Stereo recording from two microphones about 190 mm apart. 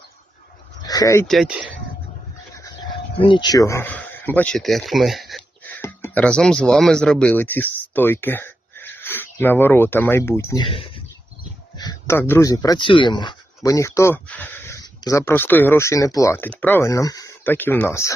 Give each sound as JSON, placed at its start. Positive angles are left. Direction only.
{"t": 0.8, "sound": "a sound", "side_deg": 20}
{"t": 1.3, "sound": "speech", "side_deg": 0}
{"t": 2.6, "sound": "speech", "side_deg": 25}